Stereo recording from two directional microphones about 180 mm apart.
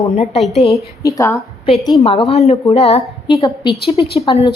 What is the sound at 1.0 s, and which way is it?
Speech, 15° left (ahead or behind).